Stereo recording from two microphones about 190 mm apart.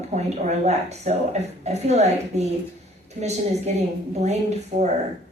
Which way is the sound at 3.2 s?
40° right (ahead or behind).